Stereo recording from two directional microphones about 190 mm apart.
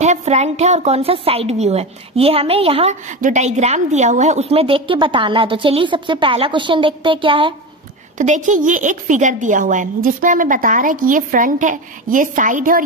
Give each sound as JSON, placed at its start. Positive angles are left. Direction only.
{"t": 0.0, "sound": "a woman's voice", "side_deg": -40}
{"t": 8.2, "sound": "speech", "side_deg": -40}